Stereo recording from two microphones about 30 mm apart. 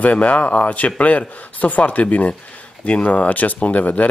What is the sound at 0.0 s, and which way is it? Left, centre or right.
Speech, left.